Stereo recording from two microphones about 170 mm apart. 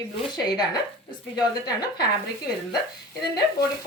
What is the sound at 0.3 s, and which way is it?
A woman's voice, 25° left (ahead or behind).